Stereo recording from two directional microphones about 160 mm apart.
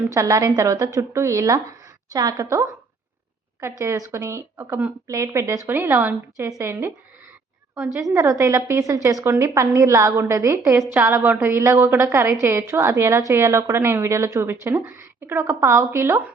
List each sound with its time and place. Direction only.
0.1 s a woman's voice: 20° right (ahead or behind)
7.9 s a woman's voice: 20° right (ahead or behind)